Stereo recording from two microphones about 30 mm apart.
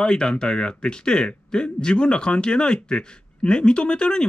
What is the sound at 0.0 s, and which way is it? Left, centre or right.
A man's voice, left.